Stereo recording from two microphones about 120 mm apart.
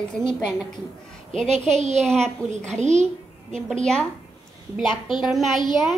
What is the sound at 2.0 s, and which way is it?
A woman's voice, 5° left (ahead or behind).